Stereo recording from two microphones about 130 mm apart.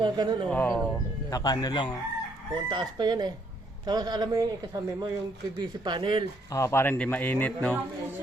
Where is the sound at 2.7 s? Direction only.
35° right (ahead or behind).